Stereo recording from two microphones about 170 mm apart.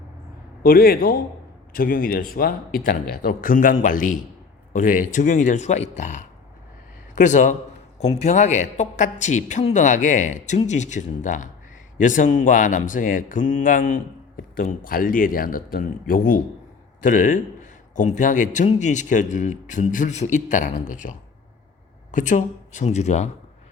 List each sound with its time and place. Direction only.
0.6 s a man's voice: 60° left (ahead or behind); by 23.3 s 40° left (ahead or behind)